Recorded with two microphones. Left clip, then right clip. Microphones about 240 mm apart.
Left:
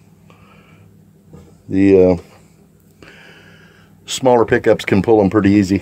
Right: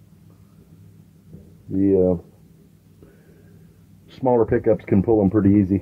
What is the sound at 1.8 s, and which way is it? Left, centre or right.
Speech, left.